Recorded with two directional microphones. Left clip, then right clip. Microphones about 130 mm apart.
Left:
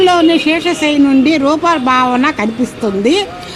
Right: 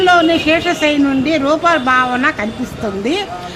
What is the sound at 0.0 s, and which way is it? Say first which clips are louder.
Speech: left 1 dB; 20° left (ahead or behind).